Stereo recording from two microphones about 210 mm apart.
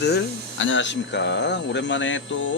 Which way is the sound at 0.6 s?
60° left (ahead or behind).